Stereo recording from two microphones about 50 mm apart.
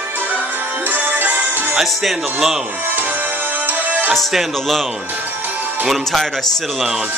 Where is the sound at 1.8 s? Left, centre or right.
Centre.